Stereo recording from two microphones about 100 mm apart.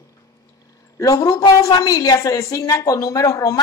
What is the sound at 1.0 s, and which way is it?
A woman's voice, 35° left (ahead or behind).